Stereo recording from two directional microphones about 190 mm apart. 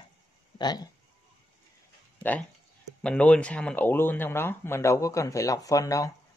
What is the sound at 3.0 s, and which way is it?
Speech, 5° left (ahead or behind).